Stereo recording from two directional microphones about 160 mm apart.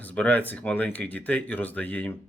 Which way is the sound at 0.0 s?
10° left (ahead or behind).